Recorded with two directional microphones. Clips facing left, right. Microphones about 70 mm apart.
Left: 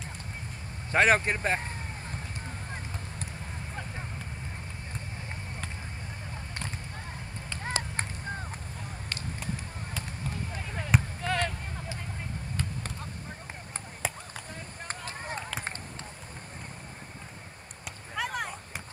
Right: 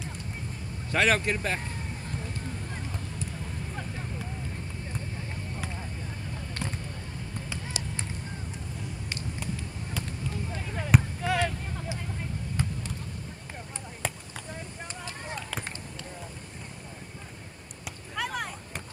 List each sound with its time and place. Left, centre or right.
0.9 s speech: left
7.6 s chop: left
10.5 s a sound: centre
14.0 s basketball bounce: centre
15.0 s chop: left
17.8 s a sound: centre